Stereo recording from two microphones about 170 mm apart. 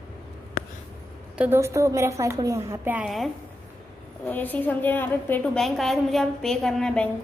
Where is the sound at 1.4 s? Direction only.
15° right (ahead or behind).